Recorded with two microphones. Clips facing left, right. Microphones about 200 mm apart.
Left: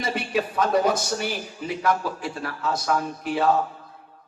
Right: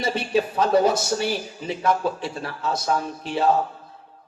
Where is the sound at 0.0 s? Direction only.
30° right (ahead or behind).